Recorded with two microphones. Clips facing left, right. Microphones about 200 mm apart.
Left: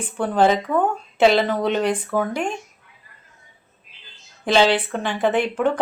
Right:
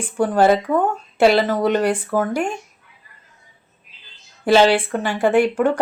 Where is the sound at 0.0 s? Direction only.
10° right (ahead or behind).